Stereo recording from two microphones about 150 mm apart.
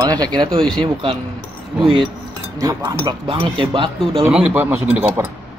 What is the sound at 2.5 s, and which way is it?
Speech, 25° right (ahead or behind).